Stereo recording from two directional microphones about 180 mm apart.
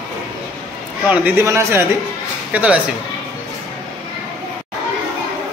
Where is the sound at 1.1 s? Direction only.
10° right (ahead or behind).